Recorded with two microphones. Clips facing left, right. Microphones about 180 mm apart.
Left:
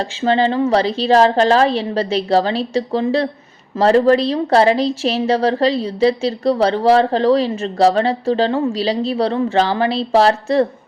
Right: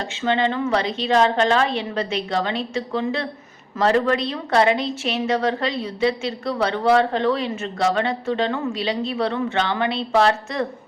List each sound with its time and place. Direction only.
0.0 s a woman's voice: 35° left (ahead or behind)